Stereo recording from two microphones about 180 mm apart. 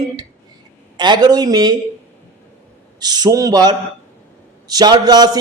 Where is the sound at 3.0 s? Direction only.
20° right (ahead or behind).